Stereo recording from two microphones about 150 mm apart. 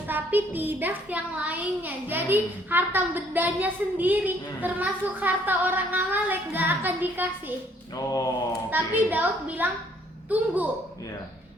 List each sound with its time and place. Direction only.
0.1 s a child's voice: 10° right (ahead or behind)
7.9 s mantra: 25° left (ahead or behind)
8.7 s a child's voice: 10° right (ahead or behind)